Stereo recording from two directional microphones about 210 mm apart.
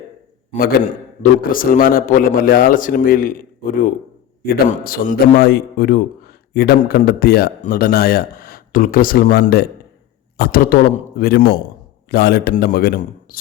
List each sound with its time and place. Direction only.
0.5 s a man's voice: 35° left (ahead or behind)